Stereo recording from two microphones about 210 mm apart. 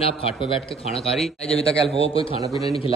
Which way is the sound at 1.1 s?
Centre (ahead or behind).